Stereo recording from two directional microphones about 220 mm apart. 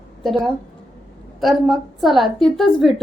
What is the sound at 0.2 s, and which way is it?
A woman's voice, centre (ahead or behind).